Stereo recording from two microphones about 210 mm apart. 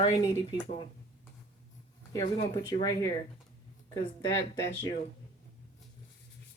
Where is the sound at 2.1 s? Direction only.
20° left (ahead or behind).